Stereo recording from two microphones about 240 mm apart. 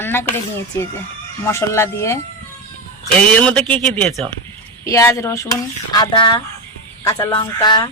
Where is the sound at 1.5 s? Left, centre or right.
Centre.